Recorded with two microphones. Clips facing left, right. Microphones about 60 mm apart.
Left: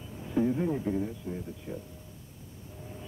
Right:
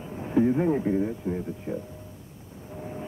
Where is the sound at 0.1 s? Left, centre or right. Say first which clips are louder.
Right 5 dB; right.